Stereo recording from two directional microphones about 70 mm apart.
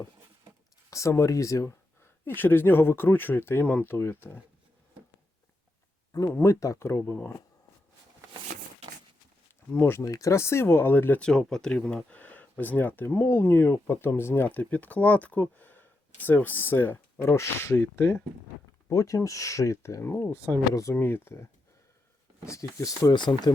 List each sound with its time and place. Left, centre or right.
0.9 s speech: left
2.2 s speech: left
6.4 s speech: left
10.0 s speech: left
11.2 s speech: centre
12.1 s speech: left
17.2 s speech: left
22.4 s speech: left
23.1 s speech: left